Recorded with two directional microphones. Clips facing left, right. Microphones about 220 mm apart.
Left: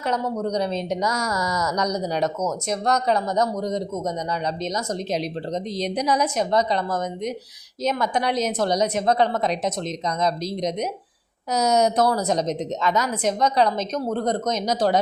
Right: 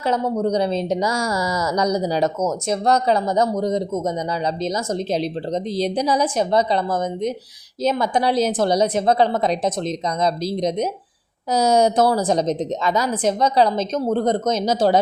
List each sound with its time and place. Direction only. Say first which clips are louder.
0.0 s a woman's voice: right 4 dB; 30° right (ahead or behind)